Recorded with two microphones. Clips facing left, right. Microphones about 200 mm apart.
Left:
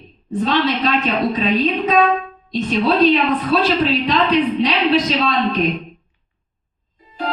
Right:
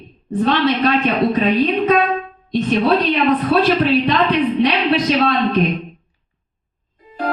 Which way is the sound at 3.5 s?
60° right (ahead or behind).